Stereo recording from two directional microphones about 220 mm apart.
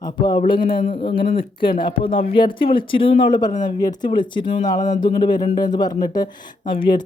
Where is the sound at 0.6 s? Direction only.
40° left (ahead or behind).